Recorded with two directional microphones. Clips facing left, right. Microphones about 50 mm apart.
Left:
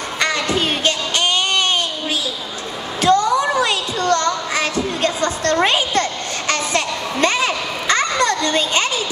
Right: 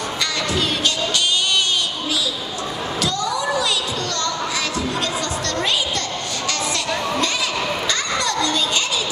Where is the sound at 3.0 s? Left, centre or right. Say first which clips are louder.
Left 10 dB; left.